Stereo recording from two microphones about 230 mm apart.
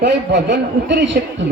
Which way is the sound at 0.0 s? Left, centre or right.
Right.